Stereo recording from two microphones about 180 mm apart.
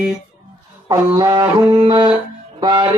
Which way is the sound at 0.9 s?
20° right (ahead or behind).